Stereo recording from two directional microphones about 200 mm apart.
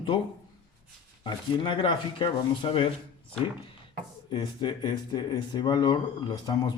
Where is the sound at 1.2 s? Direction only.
25° left (ahead or behind).